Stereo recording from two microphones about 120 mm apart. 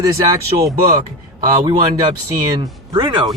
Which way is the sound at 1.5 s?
30° right (ahead or behind).